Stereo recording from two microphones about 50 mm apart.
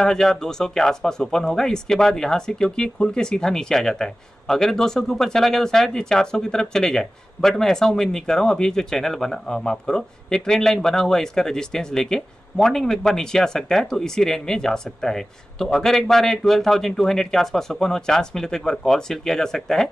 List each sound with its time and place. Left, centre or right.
0.0 s speech: centre